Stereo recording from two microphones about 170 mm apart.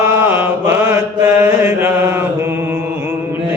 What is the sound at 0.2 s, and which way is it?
Mantra, 15° right (ahead or behind).